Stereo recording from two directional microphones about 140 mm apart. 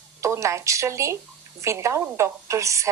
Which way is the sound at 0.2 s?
20° right (ahead or behind).